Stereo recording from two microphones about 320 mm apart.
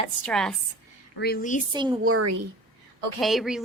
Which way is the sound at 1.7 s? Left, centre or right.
Centre.